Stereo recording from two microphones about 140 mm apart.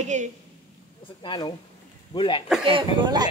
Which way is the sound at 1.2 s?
35° left (ahead or behind).